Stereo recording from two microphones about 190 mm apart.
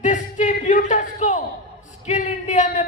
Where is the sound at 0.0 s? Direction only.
40° left (ahead or behind).